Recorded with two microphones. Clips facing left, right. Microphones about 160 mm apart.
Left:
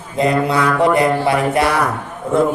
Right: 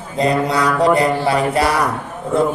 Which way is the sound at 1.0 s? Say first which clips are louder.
Left 1 dB; 30° right (ahead or behind).